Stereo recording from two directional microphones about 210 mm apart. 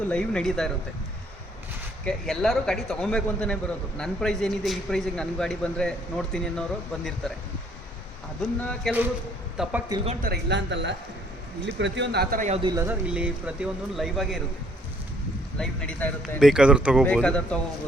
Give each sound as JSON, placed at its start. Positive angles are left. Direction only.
{"t": 0.1, "sound": "a man's voice", "side_deg": 5}
{"t": 2.0, "sound": "a man's voice", "side_deg": 0}
{"t": 8.4, "sound": "a man's voice", "side_deg": 0}
{"t": 10.2, "sound": "a man's voice", "side_deg": -60}
{"t": 12.6, "sound": "a man's voice", "side_deg": -15}
{"t": 15.5, "sound": "a man's voice", "side_deg": 5}